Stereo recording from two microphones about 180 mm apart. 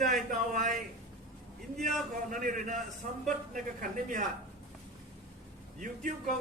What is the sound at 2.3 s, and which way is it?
A man's voice, 50° right (ahead or behind).